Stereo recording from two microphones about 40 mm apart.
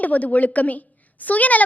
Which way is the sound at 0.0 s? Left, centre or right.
Left.